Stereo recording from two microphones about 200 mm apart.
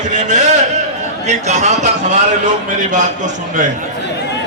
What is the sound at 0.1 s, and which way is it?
A man's voice, 35° right (ahead or behind).